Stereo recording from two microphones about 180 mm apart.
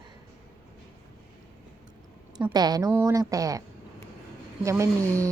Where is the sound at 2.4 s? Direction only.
20° right (ahead or behind).